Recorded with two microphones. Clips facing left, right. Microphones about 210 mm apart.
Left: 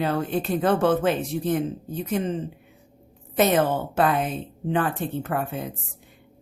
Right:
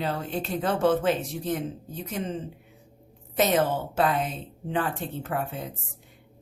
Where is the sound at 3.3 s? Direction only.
55° left (ahead or behind).